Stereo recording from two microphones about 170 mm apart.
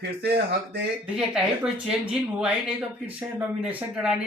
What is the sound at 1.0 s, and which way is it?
Speech, 5° right (ahead or behind).